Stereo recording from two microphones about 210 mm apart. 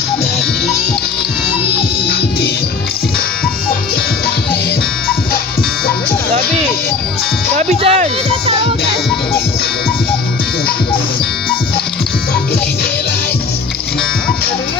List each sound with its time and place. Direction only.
7.5 s speech: 30° right (ahead or behind)